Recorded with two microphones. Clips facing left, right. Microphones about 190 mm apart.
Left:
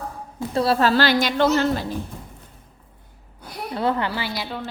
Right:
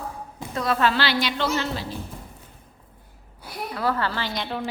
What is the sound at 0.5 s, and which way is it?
Speech, 30° left (ahead or behind).